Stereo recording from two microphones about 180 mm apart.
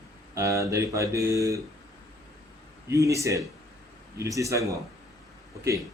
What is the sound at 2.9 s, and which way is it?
Speech, 15° right (ahead or behind).